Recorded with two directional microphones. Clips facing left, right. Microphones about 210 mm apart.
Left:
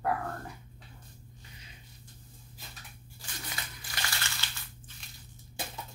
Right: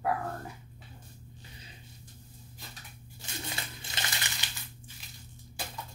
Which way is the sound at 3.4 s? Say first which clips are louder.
Right 2 dB; 25° right (ahead or behind).